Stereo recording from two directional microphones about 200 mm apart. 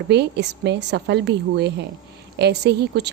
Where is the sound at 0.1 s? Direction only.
60° right (ahead or behind).